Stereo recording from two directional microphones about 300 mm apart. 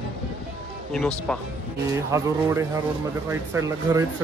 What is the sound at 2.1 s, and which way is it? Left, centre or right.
Speech, centre.